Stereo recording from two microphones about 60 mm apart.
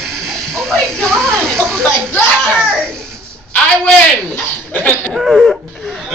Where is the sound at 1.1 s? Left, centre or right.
Centre.